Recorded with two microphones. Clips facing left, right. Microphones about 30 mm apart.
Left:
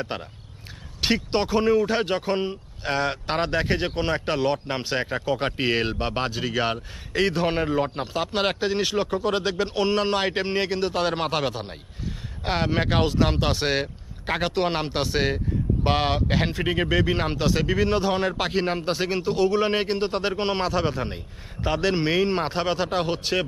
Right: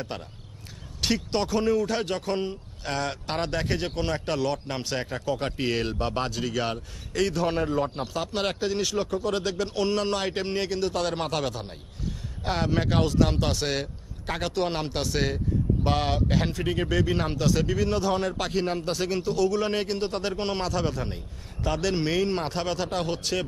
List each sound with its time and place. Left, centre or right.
0.1 s speech: left